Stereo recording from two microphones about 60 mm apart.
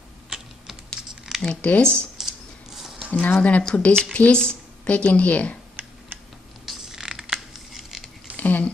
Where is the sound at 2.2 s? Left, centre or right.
Centre.